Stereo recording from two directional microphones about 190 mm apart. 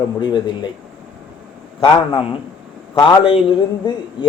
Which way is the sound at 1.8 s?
25° left (ahead or behind).